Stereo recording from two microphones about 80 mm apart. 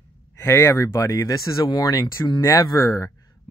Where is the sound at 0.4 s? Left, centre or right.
Left.